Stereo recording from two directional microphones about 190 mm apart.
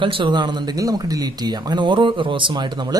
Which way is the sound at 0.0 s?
25° right (ahead or behind).